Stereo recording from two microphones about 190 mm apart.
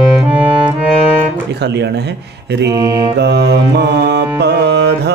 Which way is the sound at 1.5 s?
60° right (ahead or behind).